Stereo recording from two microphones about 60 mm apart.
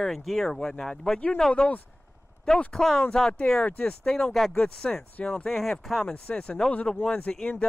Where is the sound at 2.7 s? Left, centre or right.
Centre.